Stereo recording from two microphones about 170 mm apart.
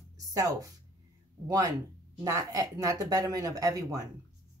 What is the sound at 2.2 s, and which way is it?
Speech, 20° right (ahead or behind).